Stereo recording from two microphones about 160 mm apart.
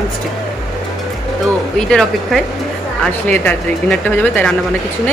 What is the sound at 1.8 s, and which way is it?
Speech, 5° left (ahead or behind).